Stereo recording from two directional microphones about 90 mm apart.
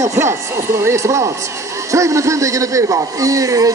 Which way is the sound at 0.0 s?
30° right (ahead or behind).